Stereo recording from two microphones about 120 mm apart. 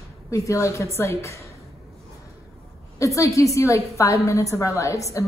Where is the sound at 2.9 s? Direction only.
25° left (ahead or behind).